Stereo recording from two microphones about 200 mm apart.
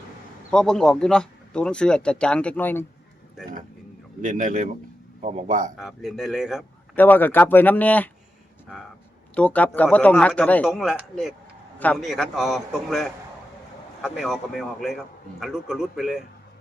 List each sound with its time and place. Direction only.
0.5 s speech: 5° left (ahead or behind)
4.2 s speech: 40° right (ahead or behind)
5.7 s speech: centre (ahead or behind)
6.9 s a man's voice: 10° left (ahead or behind)